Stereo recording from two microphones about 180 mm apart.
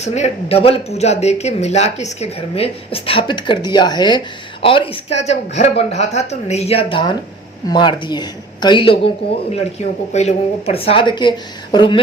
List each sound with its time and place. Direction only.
0.0 s speech: 35° left (ahead or behind)